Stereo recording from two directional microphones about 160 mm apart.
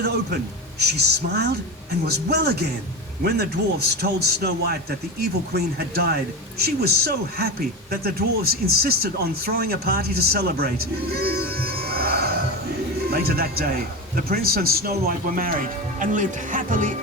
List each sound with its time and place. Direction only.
0.8 s a man's voice: 90° right; by 10.7 s 75° right (ahead or behind)
11.1 s music: 75° right (ahead or behind)
13.1 s speech: 75° right (ahead or behind); by 17.0 s 55° right (ahead or behind)